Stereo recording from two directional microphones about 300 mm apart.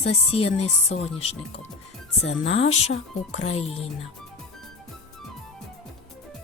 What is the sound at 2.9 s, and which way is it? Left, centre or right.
Speech, left.